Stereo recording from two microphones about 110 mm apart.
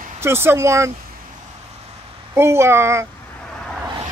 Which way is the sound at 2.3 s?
25° right (ahead or behind).